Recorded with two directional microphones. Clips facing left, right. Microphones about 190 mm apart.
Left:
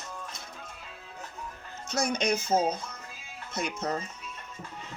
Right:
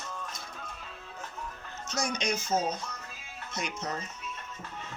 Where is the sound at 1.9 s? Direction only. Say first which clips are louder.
Left 4 dB; 55° left (ahead or behind).